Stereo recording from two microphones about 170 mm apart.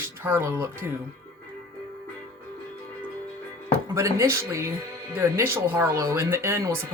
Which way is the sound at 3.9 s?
15° right (ahead or behind).